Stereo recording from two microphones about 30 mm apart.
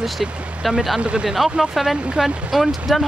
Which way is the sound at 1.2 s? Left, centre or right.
Centre.